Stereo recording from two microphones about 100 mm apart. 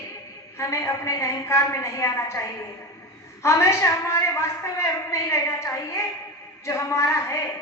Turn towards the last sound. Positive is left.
turn(degrees=30)  # may be behind; listen again after turning